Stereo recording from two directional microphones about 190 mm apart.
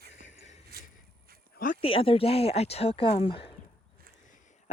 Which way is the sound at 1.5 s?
45° left (ahead or behind).